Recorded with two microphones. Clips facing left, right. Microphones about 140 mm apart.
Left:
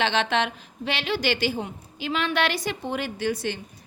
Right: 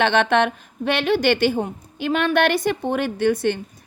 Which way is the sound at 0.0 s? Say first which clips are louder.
Right 6 dB; 55° right (ahead or behind).